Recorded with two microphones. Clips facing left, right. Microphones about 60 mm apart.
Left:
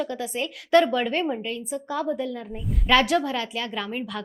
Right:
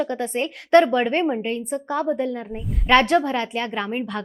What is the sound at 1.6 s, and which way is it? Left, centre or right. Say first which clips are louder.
Speech: right 4 dB; right.